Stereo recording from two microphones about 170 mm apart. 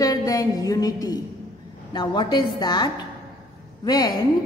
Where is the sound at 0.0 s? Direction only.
20° left (ahead or behind).